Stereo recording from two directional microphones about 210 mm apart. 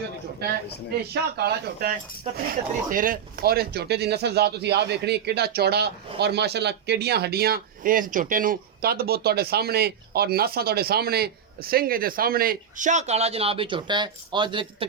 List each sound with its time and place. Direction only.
1.1 s speech: 50° right (ahead or behind)
2.9 s speech: 40° right (ahead or behind); by 14.8 s 25° right (ahead or behind)